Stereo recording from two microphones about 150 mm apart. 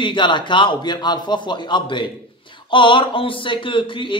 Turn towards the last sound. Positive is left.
turn(degrees=35)  # may be behind; listen again after turning